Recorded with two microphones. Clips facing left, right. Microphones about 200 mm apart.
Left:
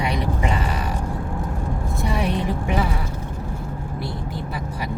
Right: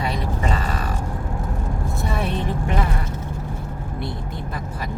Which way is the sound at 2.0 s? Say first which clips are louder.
Left 2 dB; 15° left (ahead or behind).